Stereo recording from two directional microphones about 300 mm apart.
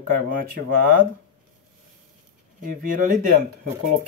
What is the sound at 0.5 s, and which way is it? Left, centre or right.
Speech, right.